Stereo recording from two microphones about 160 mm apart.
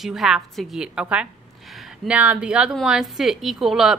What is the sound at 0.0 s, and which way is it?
A woman's voice, centre (ahead or behind).